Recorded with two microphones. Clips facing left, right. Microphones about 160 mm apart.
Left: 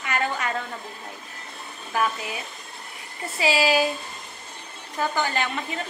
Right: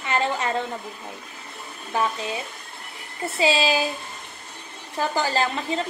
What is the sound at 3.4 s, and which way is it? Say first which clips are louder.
Speech: even; 25° right (ahead or behind).